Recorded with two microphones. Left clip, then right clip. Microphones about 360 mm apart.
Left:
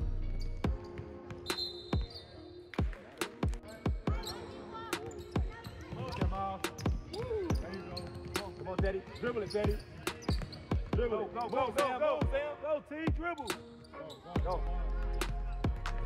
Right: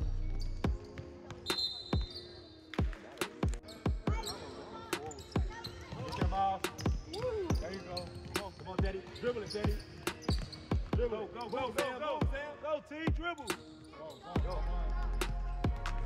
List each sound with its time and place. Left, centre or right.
0.6 s basketball bounce: centre
2.7 s music: centre
5.3 s basketball bounce: centre
6.3 s music: right
6.6 s basketball bounce: centre
11.0 s speech: centre
15.1 s music: centre